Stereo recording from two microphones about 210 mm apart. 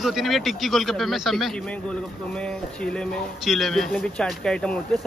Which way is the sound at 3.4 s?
Centre (ahead or behind).